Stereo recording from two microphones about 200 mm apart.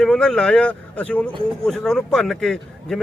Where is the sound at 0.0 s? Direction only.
5° left (ahead or behind).